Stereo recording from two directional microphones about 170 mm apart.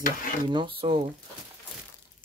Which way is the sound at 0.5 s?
30° right (ahead or behind).